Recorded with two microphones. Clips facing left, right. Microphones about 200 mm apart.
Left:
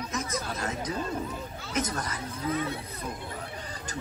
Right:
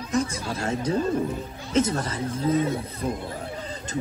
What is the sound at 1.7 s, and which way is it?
Speech, 25° right (ahead or behind).